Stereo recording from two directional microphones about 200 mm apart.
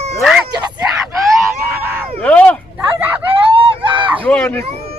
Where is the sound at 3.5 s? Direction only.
25° right (ahead or behind).